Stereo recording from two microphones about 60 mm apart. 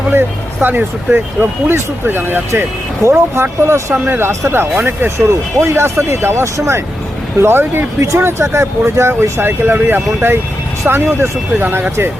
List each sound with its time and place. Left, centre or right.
0.1 s speech: right
3.9 s speech: right
4.2 s speech: right